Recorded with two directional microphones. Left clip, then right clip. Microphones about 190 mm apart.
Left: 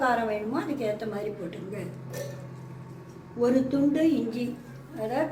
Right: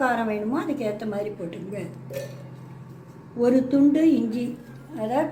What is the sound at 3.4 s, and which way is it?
A woman's voice, 50° right (ahead or behind).